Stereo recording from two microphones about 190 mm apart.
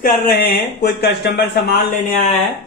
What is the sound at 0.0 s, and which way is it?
Speech, 55° left (ahead or behind).